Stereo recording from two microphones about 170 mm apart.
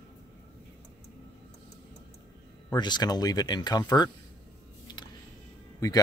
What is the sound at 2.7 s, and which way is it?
Speech, 25° left (ahead or behind).